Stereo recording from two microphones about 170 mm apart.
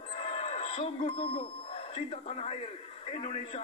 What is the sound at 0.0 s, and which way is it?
Speech, 35° left (ahead or behind).